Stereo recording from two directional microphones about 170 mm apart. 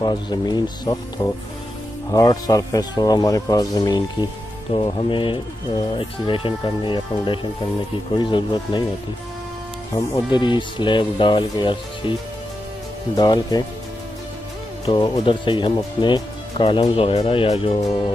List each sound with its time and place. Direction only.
0.0 s speech: 25° left (ahead or behind)
9.9 s speech: 25° left (ahead or behind)
14.9 s speech: 30° left (ahead or behind)